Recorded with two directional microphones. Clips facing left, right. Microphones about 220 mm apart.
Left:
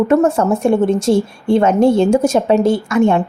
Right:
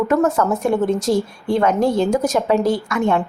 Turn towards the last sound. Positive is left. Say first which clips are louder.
# left 5 dB
turn(degrees=25)  # may be behind; listen again after turning